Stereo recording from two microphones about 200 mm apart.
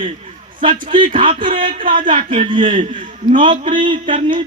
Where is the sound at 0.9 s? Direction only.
25° right (ahead or behind).